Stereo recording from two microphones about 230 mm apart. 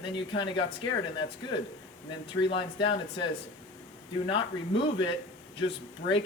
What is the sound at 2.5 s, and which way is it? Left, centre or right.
Speech, left.